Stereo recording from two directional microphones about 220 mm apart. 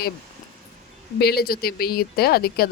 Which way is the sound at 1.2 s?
45° left (ahead or behind).